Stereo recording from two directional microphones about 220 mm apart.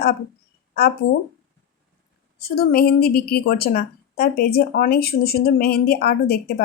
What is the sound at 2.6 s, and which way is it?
A woman's voice, 45° left (ahead or behind).